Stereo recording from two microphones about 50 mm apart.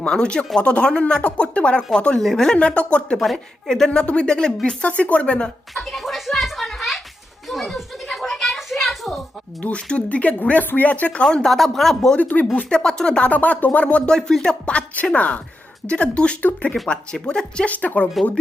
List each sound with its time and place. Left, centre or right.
0.0 s speech: centre
5.7 s a sound: centre
9.6 s speech: left
11.2 s speech: centre
12.1 s speech: left
12.7 s speech: centre
13.3 s speech: left
14.2 s speech: centre
16.8 s speech: centre
17.2 s speech: centre
17.7 s speech: left